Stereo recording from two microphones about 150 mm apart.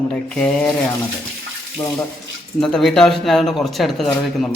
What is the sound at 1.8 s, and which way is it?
Speech, 25° left (ahead or behind).